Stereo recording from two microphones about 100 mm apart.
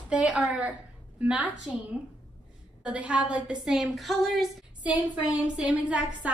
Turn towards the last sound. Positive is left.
turn(degrees=-15)  # may be behind; listen again after turning